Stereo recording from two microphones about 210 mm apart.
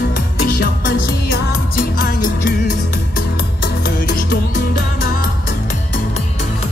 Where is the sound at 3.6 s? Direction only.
45° left (ahead or behind).